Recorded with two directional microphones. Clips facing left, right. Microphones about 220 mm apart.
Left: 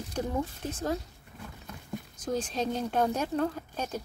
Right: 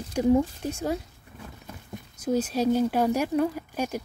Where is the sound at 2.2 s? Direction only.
10° right (ahead or behind).